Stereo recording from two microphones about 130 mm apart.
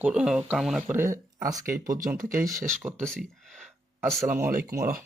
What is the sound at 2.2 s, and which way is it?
Speech, 90° right.